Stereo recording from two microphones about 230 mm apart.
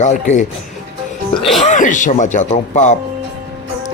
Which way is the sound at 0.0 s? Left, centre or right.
Left.